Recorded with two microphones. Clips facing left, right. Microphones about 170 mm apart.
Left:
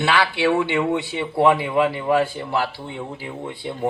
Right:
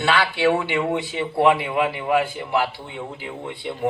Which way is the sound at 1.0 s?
25° left (ahead or behind).